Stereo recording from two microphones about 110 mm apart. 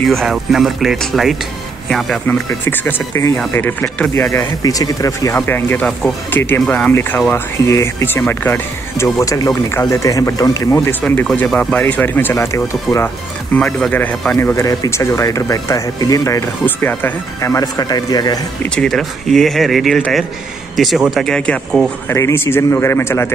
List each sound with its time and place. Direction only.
0.0 s speech: centre (ahead or behind)
2.2 s speech: 20° left (ahead or behind)
5.5 s speech: 20° left (ahead or behind)
10.7 s speech: 15° left (ahead or behind)
13.6 s speech: 10° left (ahead or behind); by 16.4 s 30° left (ahead or behind)
16.6 s speech: 20° left (ahead or behind); by 18.4 s 35° left (ahead or behind)
18.9 s speech: 5° left (ahead or behind)
22.1 s speech: 25° left (ahead or behind)